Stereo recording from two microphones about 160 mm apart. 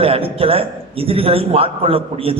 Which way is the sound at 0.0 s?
35° right (ahead or behind).